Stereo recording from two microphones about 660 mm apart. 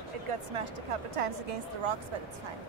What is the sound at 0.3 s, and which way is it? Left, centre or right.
A woman's voice, right.